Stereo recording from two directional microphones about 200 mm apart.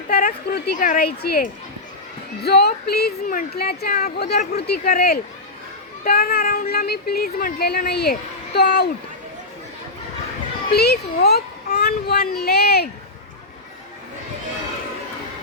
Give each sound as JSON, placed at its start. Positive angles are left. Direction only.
{"t": 0.1, "sound": "speech", "side_deg": 45}
{"t": 2.4, "sound": "speech", "side_deg": 55}
{"t": 10.8, "sound": "a child's voice", "side_deg": 55}